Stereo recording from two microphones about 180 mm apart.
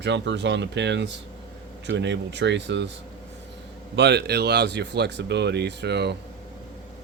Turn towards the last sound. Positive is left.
turn(degrees=-70)  # may be behind; listen again after turning